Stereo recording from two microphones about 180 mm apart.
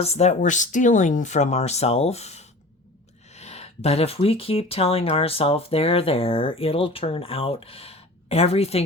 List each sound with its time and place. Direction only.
0.0 s speech: 35° left (ahead or behind)